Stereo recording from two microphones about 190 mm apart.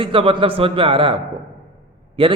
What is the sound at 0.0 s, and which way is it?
A man's voice, 30° right (ahead or behind).